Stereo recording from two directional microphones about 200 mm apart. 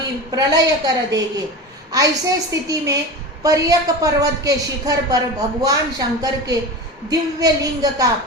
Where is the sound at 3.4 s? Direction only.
15° right (ahead or behind).